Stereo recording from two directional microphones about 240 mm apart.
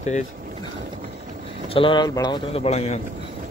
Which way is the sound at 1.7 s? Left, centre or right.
Left.